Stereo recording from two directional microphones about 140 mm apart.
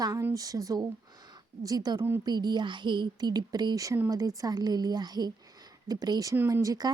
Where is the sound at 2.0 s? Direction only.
15° right (ahead or behind).